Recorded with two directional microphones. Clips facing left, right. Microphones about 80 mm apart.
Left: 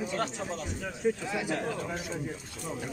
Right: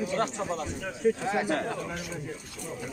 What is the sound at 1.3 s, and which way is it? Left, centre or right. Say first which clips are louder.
Speech: right 4 dB; right.